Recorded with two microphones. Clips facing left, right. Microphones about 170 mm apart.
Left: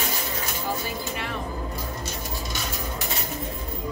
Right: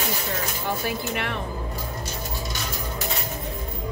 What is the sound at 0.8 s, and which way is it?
Music, 65° right (ahead or behind).